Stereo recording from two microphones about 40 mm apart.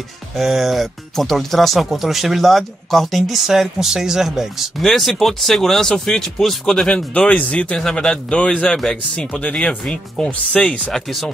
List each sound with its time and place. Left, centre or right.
0.4 s speech: centre
1.1 s speech: centre
1.8 s speech: centre
4.8 s speech: centre
7.2 s speech: left
7.7 s a man's voice: left
8.7 s speech: centre
9.3 s speech: left
10.1 s a man's voice: centre
10.9 s speech: centre